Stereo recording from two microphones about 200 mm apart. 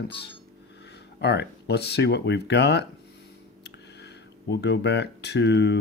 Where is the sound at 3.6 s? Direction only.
55° left (ahead or behind).